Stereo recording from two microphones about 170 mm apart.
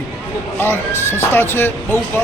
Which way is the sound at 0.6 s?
15° left (ahead or behind).